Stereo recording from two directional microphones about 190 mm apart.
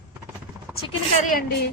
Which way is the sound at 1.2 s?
50° left (ahead or behind).